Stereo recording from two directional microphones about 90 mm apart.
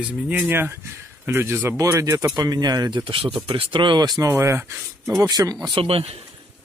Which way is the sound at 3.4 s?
80° right.